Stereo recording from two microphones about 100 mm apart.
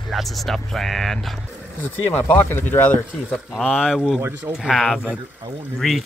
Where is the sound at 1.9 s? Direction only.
20° left (ahead or behind).